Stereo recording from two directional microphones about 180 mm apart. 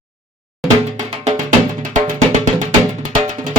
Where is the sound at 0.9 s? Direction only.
40° right (ahead or behind).